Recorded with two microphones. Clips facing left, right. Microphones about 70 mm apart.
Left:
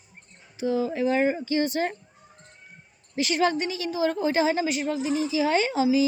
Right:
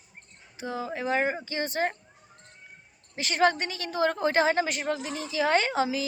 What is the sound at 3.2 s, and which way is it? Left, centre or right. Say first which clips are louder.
A woman's voice: left 1 dB; right.